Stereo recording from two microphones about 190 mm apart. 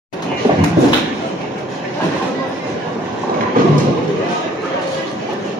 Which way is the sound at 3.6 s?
45° right (ahead or behind).